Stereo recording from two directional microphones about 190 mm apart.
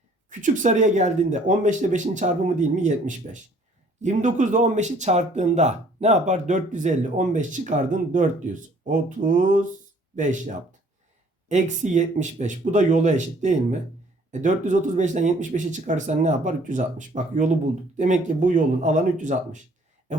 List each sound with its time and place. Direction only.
0.3 s speech: 40° right (ahead or behind)
8.9 s mantra: 45° right (ahead or behind)
10.2 s speech: 40° right (ahead or behind)